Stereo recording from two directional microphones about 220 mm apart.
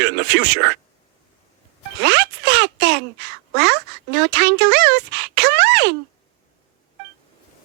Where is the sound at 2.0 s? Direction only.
50° right (ahead or behind).